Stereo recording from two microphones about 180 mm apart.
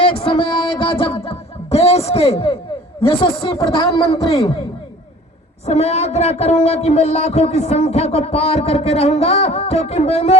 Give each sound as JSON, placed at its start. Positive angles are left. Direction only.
{"t": 0.0, "sound": "music", "side_deg": 30}
{"t": 3.0, "sound": "speech", "side_deg": 30}
{"t": 5.6, "sound": "speech", "side_deg": 35}